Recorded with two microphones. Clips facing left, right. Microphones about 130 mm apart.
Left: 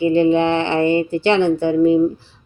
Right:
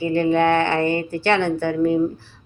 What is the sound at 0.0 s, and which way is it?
Speech, 20° left (ahead or behind).